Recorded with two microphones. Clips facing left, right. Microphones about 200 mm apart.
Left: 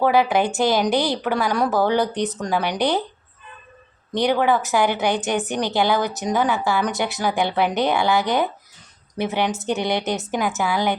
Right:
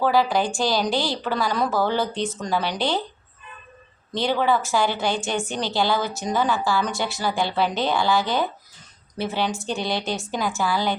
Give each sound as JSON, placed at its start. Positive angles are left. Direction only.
{"t": 0.0, "sound": "a woman's voice", "side_deg": 20}
{"t": 4.1, "sound": "a woman's voice", "side_deg": 15}